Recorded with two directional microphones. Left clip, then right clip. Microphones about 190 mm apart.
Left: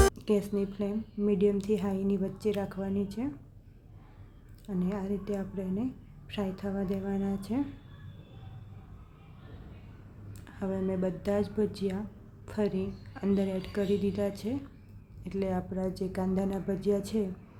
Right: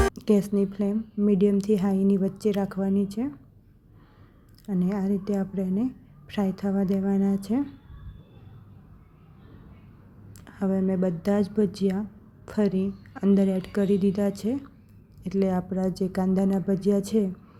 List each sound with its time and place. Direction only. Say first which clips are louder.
0.1 s a woman's voice: right 5 dB; 30° right (ahead or behind)
4.6 s a woman's voice: right 6 dB; 25° right (ahead or behind)
10.4 s a woman's voice: right 6 dB; 25° right (ahead or behind)